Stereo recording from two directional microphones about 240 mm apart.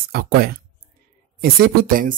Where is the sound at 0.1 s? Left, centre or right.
Right.